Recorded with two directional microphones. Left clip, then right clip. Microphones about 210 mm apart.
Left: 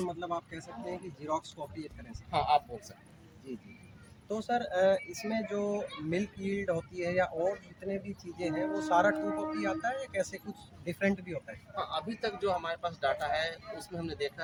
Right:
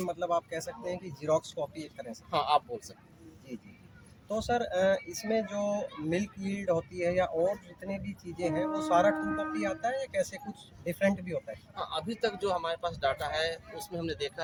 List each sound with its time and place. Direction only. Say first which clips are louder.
0.2 s speech: right 6 dB; 50° right (ahead or behind)
2.3 s speech: right 1 dB; 35° right (ahead or behind)
4.3 s a man's voice: right 2 dB; 30° right (ahead or behind)
11.7 s a man's voice: left 1 dB; 15° right (ahead or behind); by 14.4 s 30° right (ahead or behind)